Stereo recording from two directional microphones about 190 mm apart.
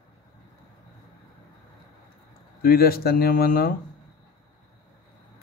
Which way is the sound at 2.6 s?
50° left (ahead or behind).